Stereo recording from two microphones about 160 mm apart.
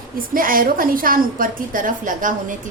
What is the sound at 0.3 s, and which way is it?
A woman's voice, 60° right (ahead or behind).